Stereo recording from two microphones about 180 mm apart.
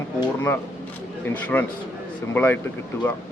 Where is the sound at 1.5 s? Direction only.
10° left (ahead or behind).